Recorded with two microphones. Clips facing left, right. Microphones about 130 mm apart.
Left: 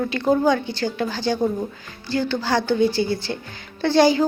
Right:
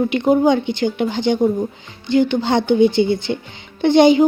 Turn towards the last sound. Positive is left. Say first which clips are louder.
# right 5 dB
turn(degrees=-20)  # may be behind; listen again after turning